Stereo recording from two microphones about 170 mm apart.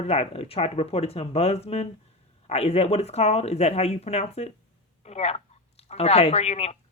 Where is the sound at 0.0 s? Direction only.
35° left (ahead or behind).